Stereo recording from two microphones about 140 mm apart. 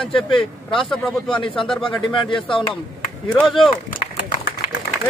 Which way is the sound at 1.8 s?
35° left (ahead or behind).